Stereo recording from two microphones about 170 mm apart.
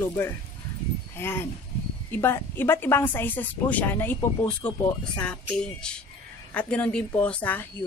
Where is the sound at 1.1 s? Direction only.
15° left (ahead or behind).